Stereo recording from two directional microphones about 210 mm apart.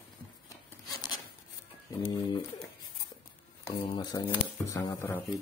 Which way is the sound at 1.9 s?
20° left (ahead or behind).